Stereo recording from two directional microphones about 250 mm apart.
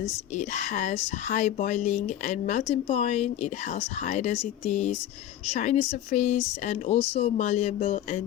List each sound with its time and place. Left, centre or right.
0.0 s speech: left